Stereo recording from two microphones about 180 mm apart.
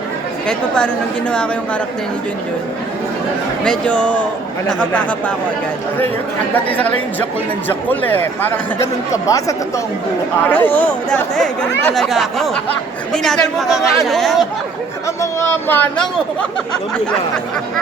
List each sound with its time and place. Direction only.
3.6 s speech: 5° left (ahead or behind)
7.7 s speech: 10° left (ahead or behind)
15.0 s speech: 15° left (ahead or behind)